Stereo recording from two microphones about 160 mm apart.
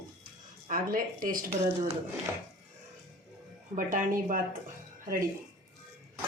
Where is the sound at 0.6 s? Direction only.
60° right (ahead or behind).